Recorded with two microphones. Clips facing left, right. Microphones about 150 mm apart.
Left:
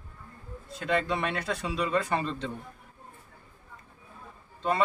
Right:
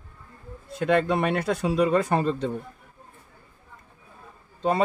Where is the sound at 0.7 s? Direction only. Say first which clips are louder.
Right 6 dB; 55° right (ahead or behind).